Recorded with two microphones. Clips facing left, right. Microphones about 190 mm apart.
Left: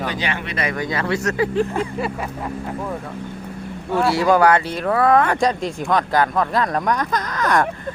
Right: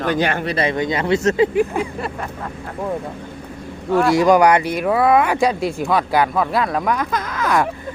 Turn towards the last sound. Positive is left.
turn(degrees=-5)  # may be behind; listen again after turning